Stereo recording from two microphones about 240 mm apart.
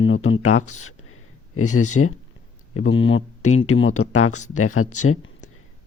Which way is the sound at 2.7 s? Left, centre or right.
Left.